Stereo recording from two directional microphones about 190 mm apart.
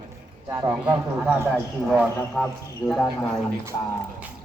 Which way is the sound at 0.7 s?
5° right (ahead or behind).